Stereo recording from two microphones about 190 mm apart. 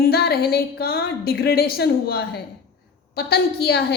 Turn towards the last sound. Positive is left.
turn(degrees=55)  # may be behind; listen again after turning